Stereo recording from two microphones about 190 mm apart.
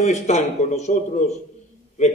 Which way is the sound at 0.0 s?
35° left (ahead or behind).